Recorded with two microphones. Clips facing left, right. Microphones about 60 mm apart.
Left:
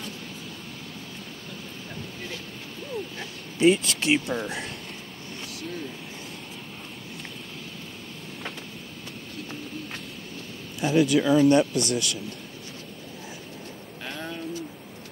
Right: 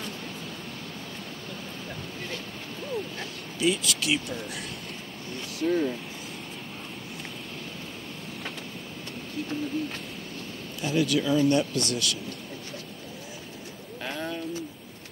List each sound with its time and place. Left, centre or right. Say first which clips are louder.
3.5 s speech: left 6 dB; left
5.7 s speech: right 12 dB; right
10.8 s speech: left 4 dB; left
14.0 s bird: right 2 dB; centre